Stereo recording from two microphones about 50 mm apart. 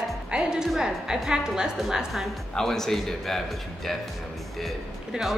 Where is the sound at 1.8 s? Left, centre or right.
Centre.